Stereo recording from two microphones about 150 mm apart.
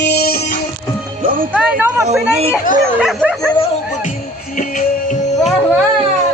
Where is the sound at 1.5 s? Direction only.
15° right (ahead or behind).